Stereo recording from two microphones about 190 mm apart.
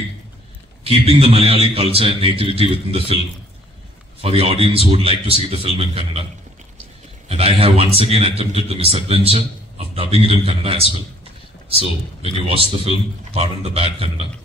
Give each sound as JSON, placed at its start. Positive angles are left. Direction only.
{"t": 0.8, "sound": "a man's voice", "side_deg": -30}
{"t": 4.2, "sound": "a man's voice", "side_deg": -30}
{"t": 7.2, "sound": "a man's voice", "side_deg": -30}
{"t": 7.8, "sound": "speech", "side_deg": 30}
{"t": 8.1, "sound": "a man's voice", "side_deg": -30}